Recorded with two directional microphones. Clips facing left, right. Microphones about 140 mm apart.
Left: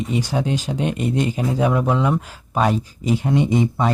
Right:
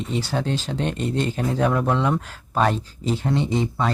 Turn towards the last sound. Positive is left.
turn(degrees=15)  # may be behind; listen again after turning